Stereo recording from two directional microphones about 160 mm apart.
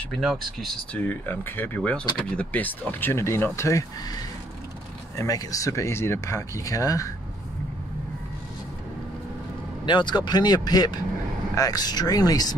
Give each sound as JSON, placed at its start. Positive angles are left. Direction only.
{"t": 0.1, "sound": "speech", "side_deg": 0}
{"t": 9.8, "sound": "speech", "side_deg": 30}